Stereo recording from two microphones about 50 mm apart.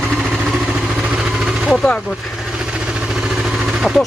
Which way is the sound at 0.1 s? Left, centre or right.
Centre.